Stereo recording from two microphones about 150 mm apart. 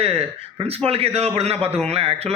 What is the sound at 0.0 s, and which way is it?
A man's voice, 40° right (ahead or behind).